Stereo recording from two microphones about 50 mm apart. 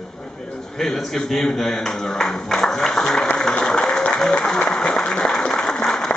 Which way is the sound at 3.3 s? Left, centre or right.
Centre.